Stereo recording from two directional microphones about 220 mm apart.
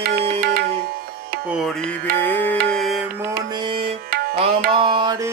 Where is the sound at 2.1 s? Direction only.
10° left (ahead or behind).